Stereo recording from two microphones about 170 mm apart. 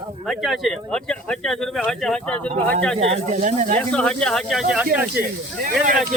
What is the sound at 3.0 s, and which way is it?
Speech, 45° right (ahead or behind).